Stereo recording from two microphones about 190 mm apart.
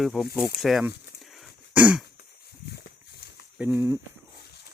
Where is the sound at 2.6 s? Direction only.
60° left (ahead or behind).